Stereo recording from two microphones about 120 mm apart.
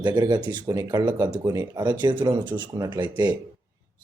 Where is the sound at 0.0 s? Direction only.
35° right (ahead or behind).